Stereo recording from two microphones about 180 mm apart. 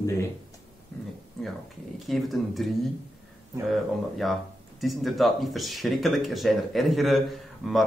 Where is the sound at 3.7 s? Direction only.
Centre (ahead or behind).